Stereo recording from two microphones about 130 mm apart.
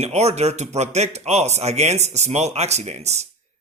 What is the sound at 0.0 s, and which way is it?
A man's voice, 55° right (ahead or behind).